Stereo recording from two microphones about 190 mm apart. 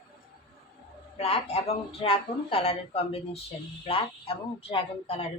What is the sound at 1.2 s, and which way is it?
Speech, 35° left (ahead or behind).